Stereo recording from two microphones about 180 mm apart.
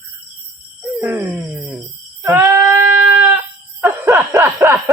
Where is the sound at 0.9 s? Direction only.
15° right (ahead or behind).